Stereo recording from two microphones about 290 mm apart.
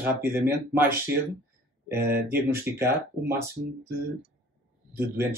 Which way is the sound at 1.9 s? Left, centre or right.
Right.